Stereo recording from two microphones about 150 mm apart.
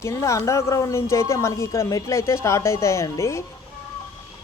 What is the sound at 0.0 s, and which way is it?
Speech, 20° left (ahead or behind).